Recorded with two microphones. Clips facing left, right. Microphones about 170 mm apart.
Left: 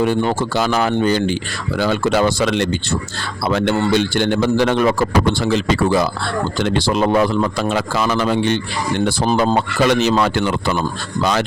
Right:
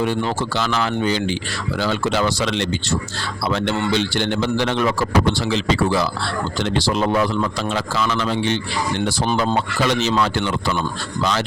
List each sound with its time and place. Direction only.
0.0 s speech: 45° left (ahead or behind)
9.6 s speech: 55° left (ahead or behind)